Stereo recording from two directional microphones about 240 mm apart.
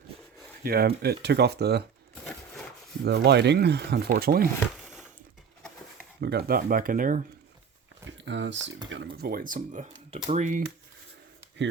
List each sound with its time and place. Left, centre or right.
0.6 s speech: right
3.0 s speech: right
4.7 s a sound: centre
6.2 s speech: right
8.2 s speech: right